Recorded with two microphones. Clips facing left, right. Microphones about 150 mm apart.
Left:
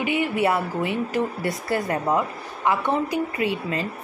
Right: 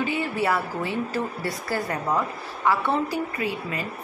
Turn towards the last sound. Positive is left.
turn(degrees=25)  # may be behind; listen again after turning